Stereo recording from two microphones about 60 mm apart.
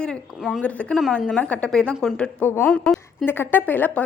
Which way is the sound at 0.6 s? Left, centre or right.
Left.